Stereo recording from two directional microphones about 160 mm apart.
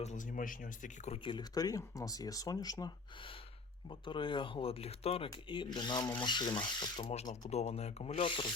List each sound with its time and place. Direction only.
0.0 s speech: 50° left (ahead or behind)
1.2 s speech: 30° left (ahead or behind)
5.3 s speech: 30° left (ahead or behind)
7.1 s speech: 50° left (ahead or behind); by 8.5 s 35° left (ahead or behind)